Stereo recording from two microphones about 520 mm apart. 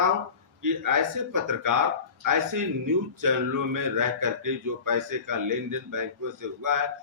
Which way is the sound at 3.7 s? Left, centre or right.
Right.